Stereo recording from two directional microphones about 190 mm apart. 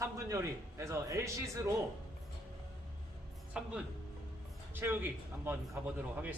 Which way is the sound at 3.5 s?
5° right (ahead or behind).